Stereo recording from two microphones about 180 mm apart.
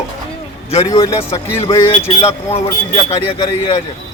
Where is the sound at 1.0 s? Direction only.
30° left (ahead or behind).